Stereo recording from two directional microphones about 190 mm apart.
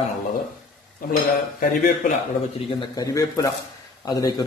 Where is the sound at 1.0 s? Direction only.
50° left (ahead or behind).